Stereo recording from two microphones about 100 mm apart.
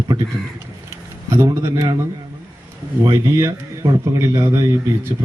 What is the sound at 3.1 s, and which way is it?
A man's voice, 30° right (ahead or behind).